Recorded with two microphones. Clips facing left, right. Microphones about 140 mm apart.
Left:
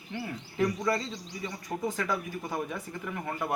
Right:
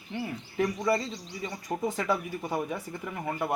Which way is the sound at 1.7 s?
25° right (ahead or behind).